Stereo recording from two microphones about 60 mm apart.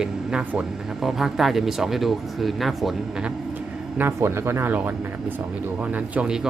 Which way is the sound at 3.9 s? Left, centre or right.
Right.